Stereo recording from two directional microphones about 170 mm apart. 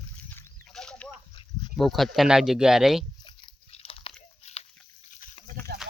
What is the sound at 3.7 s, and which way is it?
Biting, 35° left (ahead or behind).